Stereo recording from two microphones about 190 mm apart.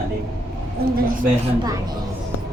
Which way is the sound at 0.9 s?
45° right (ahead or behind).